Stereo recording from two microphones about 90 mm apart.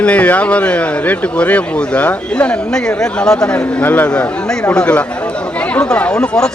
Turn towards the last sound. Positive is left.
turn(degrees=10)  # may be behind; listen again after turning